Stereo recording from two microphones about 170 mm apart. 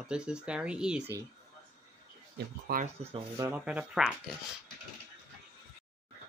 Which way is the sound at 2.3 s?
55° right (ahead or behind).